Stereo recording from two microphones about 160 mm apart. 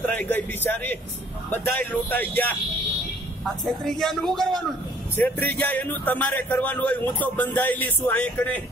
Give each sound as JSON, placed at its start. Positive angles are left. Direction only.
{"t": 0.0, "sound": "a man's voice", "side_deg": 10}